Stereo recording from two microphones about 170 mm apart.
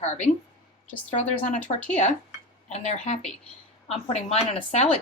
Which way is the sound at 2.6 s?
40° left (ahead or behind).